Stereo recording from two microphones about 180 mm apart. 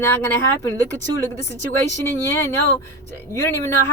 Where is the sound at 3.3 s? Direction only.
15° left (ahead or behind).